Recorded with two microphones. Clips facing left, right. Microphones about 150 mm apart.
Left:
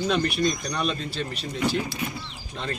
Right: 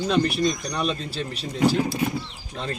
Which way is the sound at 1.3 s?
35° right (ahead or behind).